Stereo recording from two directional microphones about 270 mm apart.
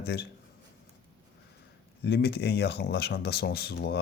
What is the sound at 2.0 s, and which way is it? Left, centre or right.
Speech, left.